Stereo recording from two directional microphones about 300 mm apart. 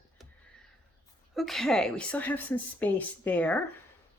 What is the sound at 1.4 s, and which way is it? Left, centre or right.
Speech, centre.